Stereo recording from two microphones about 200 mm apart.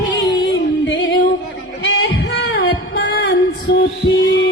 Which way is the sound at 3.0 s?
60° left (ahead or behind).